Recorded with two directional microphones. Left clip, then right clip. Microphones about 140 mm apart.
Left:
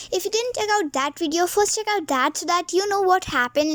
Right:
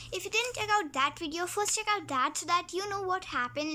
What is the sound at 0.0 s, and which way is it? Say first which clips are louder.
A child's voice: left 8 dB; 45° left (ahead or behind).